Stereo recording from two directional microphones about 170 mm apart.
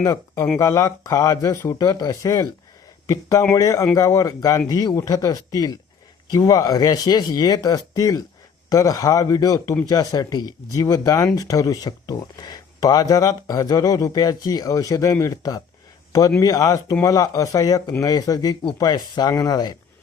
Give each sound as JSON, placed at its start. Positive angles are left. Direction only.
{"t": 0.0, "sound": "speech", "side_deg": 20}